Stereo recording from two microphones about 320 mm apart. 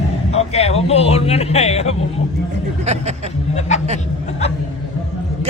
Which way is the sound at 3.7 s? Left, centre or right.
Left.